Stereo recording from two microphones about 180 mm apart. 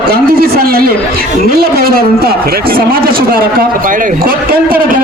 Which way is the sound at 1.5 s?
60° right (ahead or behind).